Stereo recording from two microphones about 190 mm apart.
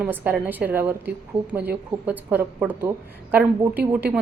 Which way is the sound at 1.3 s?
30° right (ahead or behind).